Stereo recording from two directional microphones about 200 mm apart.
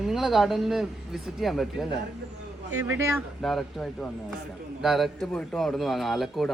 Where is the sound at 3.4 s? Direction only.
Centre (ahead or behind).